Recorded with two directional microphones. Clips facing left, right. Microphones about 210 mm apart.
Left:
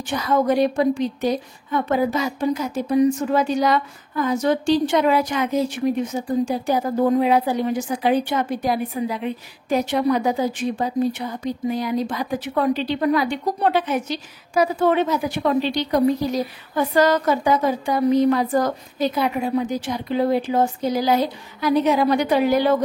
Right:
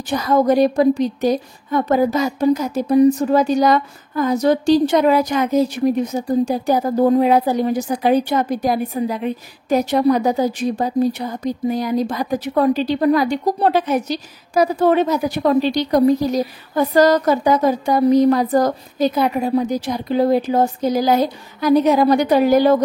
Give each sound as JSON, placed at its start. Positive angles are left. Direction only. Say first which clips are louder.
{"t": 0.1, "sound": "a woman's voice", "louder": "right 4 dB", "side_deg": -40}